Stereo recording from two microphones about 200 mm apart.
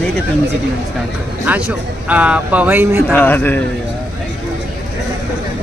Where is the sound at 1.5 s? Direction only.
5° right (ahead or behind).